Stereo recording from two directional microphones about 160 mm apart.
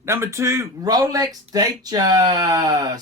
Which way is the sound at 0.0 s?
15° right (ahead or behind).